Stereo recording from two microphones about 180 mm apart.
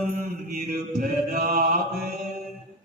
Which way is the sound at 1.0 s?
55° right (ahead or behind).